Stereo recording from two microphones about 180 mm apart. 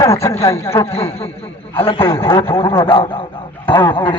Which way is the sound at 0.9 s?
35° left (ahead or behind).